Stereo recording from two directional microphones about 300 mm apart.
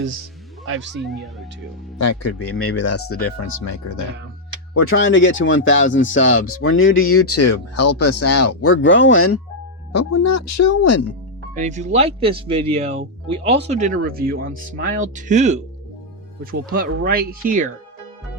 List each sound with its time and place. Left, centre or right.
0.9 s speech: centre
2.0 s speech: left
3.6 s speech: left
4.7 s speech: left
9.9 s speech: left
11.5 s speech: right